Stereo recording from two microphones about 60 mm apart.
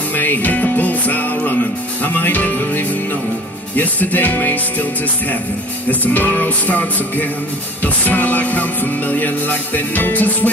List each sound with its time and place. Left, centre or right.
0.1 s music: left
5.9 s music: left